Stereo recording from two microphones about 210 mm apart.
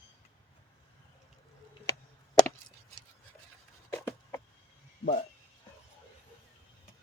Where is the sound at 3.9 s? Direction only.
15° left (ahead or behind).